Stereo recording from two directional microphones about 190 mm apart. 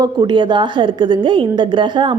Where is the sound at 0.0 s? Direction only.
20° right (ahead or behind).